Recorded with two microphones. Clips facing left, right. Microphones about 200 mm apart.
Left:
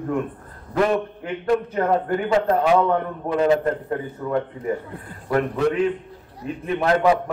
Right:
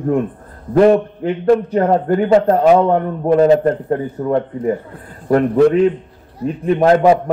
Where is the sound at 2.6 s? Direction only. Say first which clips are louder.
Right 7 dB; 45° right (ahead or behind).